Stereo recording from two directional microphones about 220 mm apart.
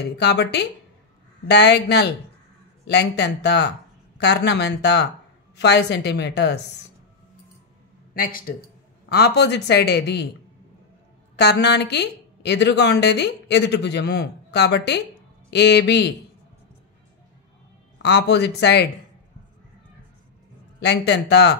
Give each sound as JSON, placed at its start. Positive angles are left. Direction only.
{"t": 0.0, "sound": "a woman's voice", "side_deg": 50}
{"t": 8.1, "sound": "a woman's voice", "side_deg": 40}
{"t": 11.3, "sound": "a woman's voice", "side_deg": 50}
{"t": 18.0, "sound": "a woman's voice", "side_deg": 50}
{"t": 20.8, "sound": "a woman's voice", "side_deg": 50}